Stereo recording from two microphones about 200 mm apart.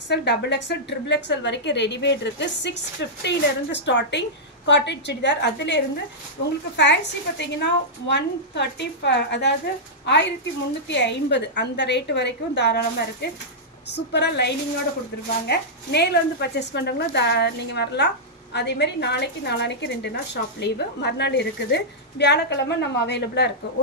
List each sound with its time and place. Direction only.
0.1 s a woman's voice: 60° left (ahead or behind)
6.8 s a woman's voice: 60° left (ahead or behind)